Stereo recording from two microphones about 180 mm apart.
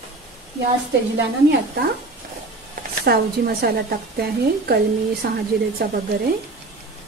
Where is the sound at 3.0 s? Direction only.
60° right (ahead or behind).